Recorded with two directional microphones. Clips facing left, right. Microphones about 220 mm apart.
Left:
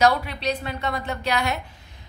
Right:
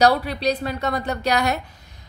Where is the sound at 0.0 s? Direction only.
35° right (ahead or behind).